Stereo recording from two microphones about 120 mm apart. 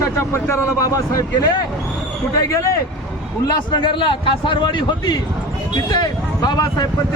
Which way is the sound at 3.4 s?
40° left (ahead or behind).